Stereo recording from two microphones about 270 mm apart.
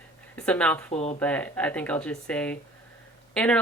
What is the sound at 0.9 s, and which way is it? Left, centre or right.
Speech, left.